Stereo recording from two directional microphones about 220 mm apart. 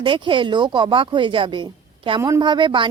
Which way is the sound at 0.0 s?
20° right (ahead or behind).